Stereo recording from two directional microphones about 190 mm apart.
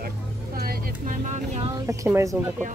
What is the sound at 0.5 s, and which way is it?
Speech, 45° right (ahead or behind).